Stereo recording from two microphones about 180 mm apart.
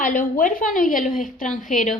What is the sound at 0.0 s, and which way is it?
A woman's voice, 50° left (ahead or behind).